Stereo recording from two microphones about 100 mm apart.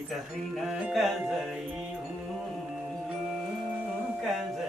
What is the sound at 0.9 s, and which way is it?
Music, centre (ahead or behind).